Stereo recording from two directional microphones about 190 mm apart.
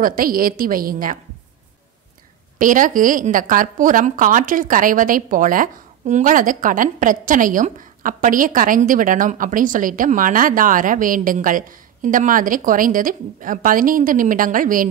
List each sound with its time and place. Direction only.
0.0 s a woman's voice: 50° right (ahead or behind)
2.6 s a woman's voice: 45° right (ahead or behind)